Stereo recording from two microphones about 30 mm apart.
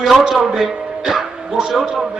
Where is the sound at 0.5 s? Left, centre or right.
Centre.